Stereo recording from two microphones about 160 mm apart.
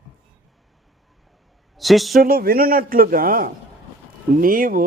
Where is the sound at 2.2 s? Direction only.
70° right (ahead or behind).